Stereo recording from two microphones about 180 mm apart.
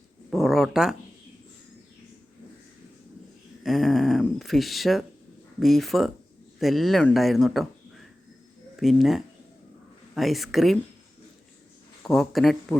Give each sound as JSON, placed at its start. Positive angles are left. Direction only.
{"t": 0.3, "sound": "speech", "side_deg": 0}
{"t": 3.6, "sound": "speech", "side_deg": 0}
{"t": 8.7, "sound": "speech", "side_deg": 0}
{"t": 12.0, "sound": "speech", "side_deg": 0}